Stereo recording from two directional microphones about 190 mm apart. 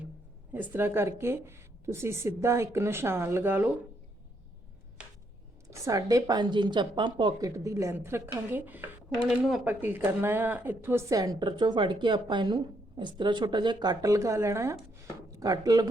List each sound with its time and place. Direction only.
0.5 s speech: 10° right (ahead or behind)
5.6 s speech: 15° right (ahead or behind)